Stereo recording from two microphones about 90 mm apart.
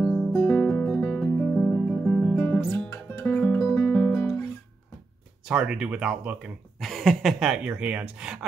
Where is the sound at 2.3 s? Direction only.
20° left (ahead or behind).